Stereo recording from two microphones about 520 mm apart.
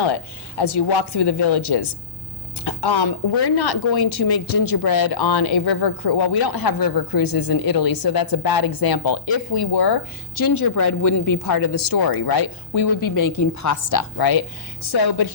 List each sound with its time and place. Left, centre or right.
0.6 s a woman's voice: left